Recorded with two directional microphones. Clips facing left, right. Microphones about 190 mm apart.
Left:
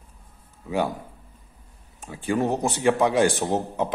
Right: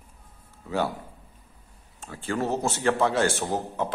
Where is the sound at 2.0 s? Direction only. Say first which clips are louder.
Left 4 dB; 15° left (ahead or behind).